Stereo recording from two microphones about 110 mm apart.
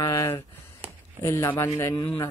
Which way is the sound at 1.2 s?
20° left (ahead or behind).